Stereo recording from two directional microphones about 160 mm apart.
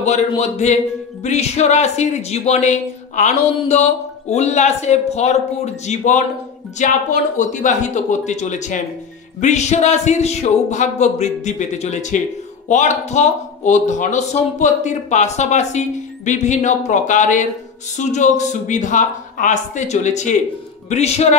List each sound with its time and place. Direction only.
0.4 s speech: 45° left (ahead or behind)